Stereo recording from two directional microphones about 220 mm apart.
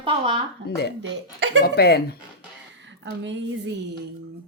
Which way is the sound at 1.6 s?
45° left (ahead or behind).